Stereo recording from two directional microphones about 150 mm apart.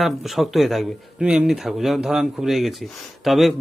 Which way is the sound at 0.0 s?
Centre (ahead or behind).